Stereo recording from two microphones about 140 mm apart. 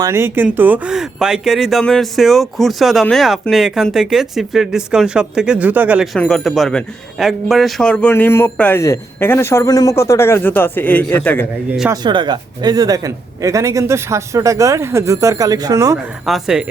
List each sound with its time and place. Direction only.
0.0 s speech: 20° right (ahead or behind)
6.1 s speech: 5° left (ahead or behind)
8.1 s a man's voice: 15° left (ahead or behind)
12.0 s speech: 35° right (ahead or behind)
16.2 s speech: 5° right (ahead or behind)